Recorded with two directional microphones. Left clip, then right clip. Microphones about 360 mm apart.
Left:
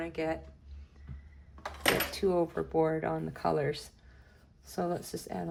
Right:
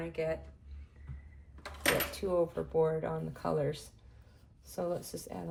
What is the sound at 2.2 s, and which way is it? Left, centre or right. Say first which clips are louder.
A woman's voice: left 3 dB; left.